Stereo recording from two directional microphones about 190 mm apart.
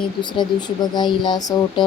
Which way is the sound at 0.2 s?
25° left (ahead or behind).